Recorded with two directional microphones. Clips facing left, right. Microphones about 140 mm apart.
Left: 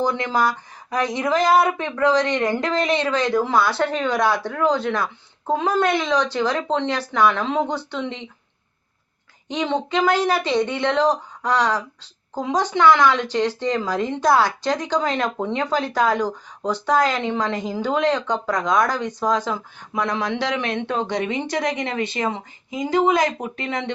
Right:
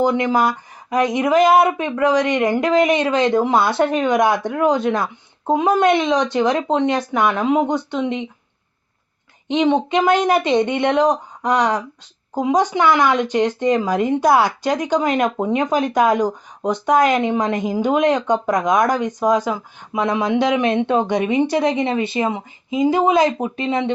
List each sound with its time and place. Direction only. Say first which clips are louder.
0.0 s speech: right 4 dB; 20° right (ahead or behind)
9.5 s speech: right 6 dB; 20° right (ahead or behind)